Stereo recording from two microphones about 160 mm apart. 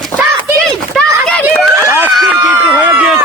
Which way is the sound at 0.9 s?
5° left (ahead or behind).